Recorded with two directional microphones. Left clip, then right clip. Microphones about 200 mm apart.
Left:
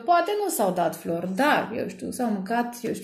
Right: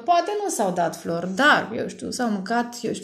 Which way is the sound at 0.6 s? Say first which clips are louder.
Right 2 dB; 30° right (ahead or behind).